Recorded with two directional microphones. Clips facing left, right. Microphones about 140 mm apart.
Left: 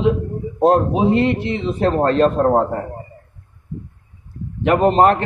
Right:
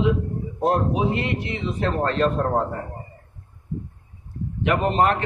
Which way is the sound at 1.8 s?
40° left (ahead or behind).